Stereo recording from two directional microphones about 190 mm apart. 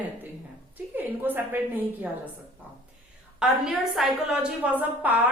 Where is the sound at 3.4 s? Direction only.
5° right (ahead or behind).